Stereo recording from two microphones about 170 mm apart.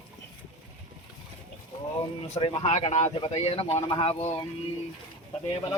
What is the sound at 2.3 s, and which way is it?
Speech, 35° left (ahead or behind).